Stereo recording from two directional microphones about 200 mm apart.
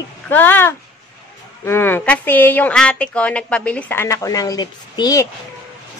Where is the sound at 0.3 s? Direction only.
10° left (ahead or behind).